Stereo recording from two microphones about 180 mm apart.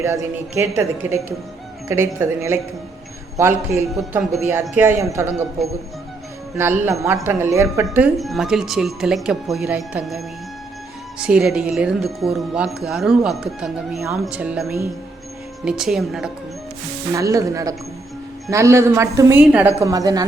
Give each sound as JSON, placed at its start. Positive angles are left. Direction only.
{"t": 0.0, "sound": "a woman's voice", "side_deg": -15}
{"t": 6.6, "sound": "a woman's voice", "side_deg": -15}
{"t": 7.9, "sound": "a woman's voice", "side_deg": -5}
{"t": 17.2, "sound": "a woman's voice", "side_deg": -20}